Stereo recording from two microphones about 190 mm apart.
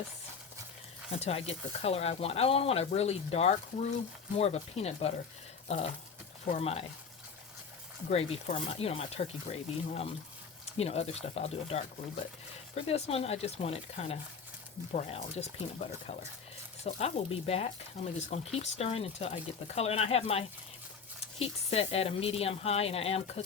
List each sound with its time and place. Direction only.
1.1 s speech: 30° left (ahead or behind)
8.1 s speech: 35° left (ahead or behind)
16.8 s speech: 35° left (ahead or behind)